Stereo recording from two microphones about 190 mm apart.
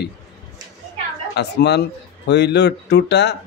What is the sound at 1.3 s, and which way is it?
A man's voice, 60° left (ahead or behind).